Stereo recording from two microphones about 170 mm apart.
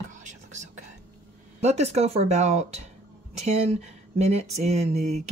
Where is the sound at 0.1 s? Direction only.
45° right (ahead or behind).